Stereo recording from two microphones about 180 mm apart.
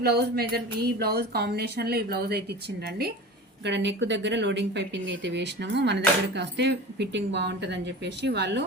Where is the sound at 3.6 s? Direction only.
80° right.